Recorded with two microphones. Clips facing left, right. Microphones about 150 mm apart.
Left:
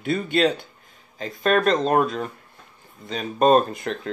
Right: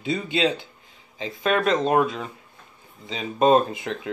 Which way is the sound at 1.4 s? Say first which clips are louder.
Left 2 dB; 15° right (ahead or behind).